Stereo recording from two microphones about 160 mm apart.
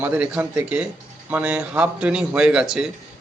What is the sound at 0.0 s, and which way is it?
A man's voice, 10° right (ahead or behind).